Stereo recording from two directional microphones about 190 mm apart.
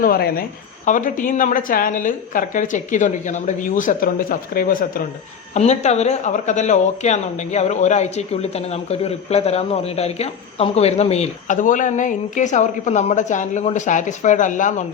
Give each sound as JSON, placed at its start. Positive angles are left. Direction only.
{"t": 0.0, "sound": "a woman's voice", "side_deg": 50}
{"t": 5.5, "sound": "speech", "side_deg": 35}